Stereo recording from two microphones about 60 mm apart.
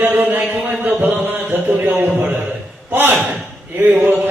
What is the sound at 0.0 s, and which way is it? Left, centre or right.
A man's voice, right.